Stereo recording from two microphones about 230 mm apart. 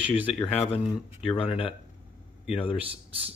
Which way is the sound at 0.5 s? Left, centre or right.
Left.